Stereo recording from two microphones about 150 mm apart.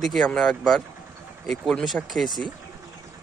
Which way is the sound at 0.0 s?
Centre (ahead or behind).